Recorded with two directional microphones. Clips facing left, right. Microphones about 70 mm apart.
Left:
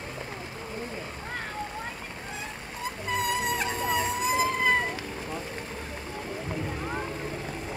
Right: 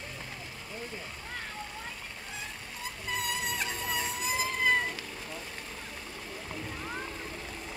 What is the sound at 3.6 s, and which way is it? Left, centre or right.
Emergency vehicle, left.